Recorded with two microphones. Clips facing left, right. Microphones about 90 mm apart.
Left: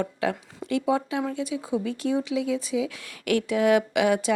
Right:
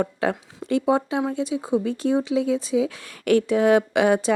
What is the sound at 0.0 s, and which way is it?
Speech, 35° right (ahead or behind).